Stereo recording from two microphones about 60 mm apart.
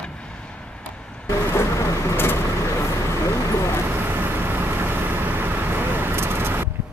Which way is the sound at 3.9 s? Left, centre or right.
Right.